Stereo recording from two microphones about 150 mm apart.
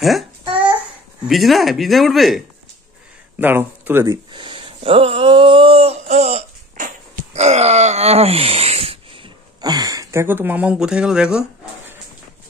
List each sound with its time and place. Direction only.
0.0 s babbling: centre (ahead or behind)
1.2 s speech: centre (ahead or behind)
3.3 s speech: 15° right (ahead or behind)
4.3 s a sound: 35° right (ahead or behind)
9.6 s speech: 25° right (ahead or behind); by 11.4 s 5° right (ahead or behind)